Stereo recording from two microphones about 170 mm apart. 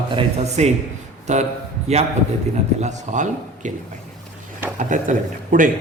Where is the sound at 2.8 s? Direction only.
45° right (ahead or behind).